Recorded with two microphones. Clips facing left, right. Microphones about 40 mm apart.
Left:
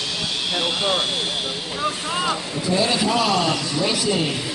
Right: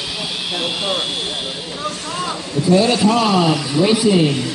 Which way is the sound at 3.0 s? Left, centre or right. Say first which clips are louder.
Right 5 dB; centre.